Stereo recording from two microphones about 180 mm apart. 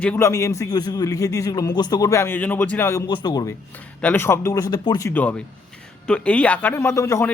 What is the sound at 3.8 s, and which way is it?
A man's voice, 10° left (ahead or behind).